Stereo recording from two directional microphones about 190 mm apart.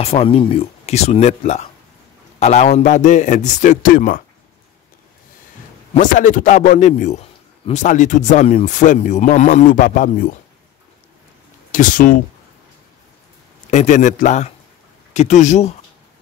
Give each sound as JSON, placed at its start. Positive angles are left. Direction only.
{"t": 0.0, "sound": "speech", "side_deg": 30}
{"t": 5.9, "sound": "speech", "side_deg": 40}
{"t": 11.7, "sound": "speech", "side_deg": 45}
{"t": 13.7, "sound": "speech", "side_deg": 40}